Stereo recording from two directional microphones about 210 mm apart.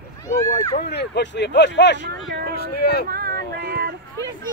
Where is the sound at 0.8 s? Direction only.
55° left (ahead or behind).